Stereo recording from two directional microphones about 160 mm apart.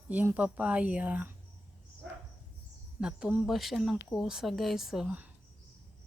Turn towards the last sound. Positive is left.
turn(degrees=-5)  # may be behind; listen again after turning